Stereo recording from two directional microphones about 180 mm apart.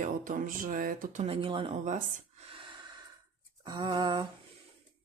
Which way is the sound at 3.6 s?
25° right (ahead or behind).